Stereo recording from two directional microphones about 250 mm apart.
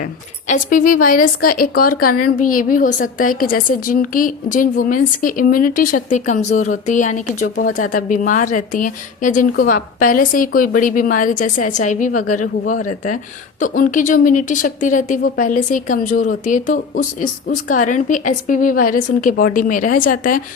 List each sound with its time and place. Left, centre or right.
0.4 s a woman's voice: left
13.6 s a woman's voice: left